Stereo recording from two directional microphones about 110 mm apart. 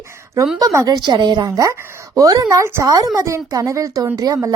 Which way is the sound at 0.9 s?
40° right (ahead or behind).